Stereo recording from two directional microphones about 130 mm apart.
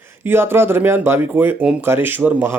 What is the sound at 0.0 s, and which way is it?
Speech, 20° right (ahead or behind).